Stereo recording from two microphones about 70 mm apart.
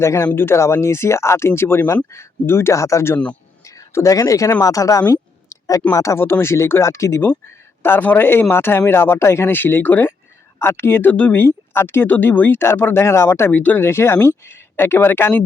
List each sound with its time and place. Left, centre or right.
0.0 s speech: left
2.7 s speech: left
3.6 s speech: left
6.1 s speech: left
7.2 s speech: left
11.4 s speech: left
12.0 s speech: left
13.6 s speech: left
13.8 s speech: left